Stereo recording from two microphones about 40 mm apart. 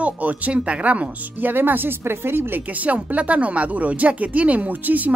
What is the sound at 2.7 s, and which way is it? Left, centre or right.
Speech, right.